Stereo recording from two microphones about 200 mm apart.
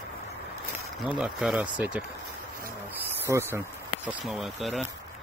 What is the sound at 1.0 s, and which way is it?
Speech, 5° right (ahead or behind).